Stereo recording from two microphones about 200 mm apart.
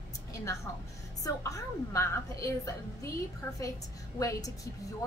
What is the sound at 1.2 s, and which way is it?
A woman's voice, 15° left (ahead or behind).